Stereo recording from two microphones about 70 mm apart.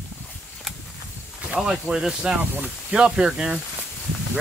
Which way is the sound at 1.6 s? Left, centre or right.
Centre.